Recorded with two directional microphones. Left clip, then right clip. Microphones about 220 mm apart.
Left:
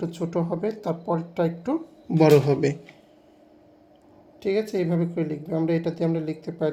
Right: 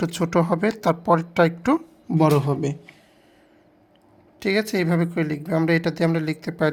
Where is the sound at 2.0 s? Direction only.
30° right (ahead or behind).